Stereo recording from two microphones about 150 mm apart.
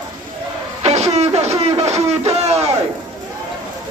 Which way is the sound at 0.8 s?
45° right (ahead or behind).